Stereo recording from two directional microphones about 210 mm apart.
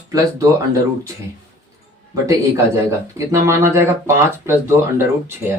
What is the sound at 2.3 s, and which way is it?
Speech, 15° right (ahead or behind).